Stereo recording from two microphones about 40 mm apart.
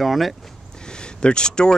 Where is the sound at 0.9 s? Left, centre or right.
Left.